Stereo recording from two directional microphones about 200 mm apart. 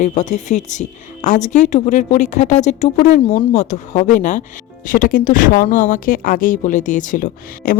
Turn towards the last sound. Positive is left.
turn(degrees=45)  # may be behind; listen again after turning